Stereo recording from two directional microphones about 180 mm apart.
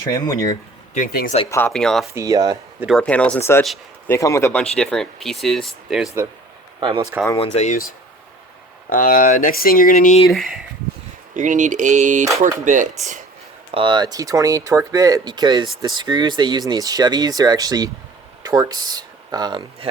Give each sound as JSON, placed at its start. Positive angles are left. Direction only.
{"t": 0.1, "sound": "speech", "side_deg": 20}
{"t": 0.9, "sound": "speech", "side_deg": 50}
{"t": 1.5, "sound": "speech", "side_deg": 15}
{"t": 1.7, "sound": "speech", "side_deg": 5}
{"t": 2.1, "sound": "speech", "side_deg": -20}
{"t": 3.0, "sound": "speech", "side_deg": 5}
{"t": 4.1, "sound": "speech", "side_deg": 15}
{"t": 4.6, "sound": "speech", "side_deg": 0}
{"t": 6.7, "sound": "speech", "side_deg": -25}
{"t": 7.3, "sound": "speech", "side_deg": 35}
{"t": 8.9, "sound": "speech", "side_deg": 50}
{"t": 10.3, "sound": "speech", "side_deg": 0}
{"t": 11.3, "sound": "speech", "side_deg": -45}
{"t": 13.7, "sound": "speech", "side_deg": -30}